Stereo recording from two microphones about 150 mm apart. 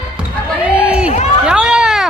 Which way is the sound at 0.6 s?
5° right (ahead or behind).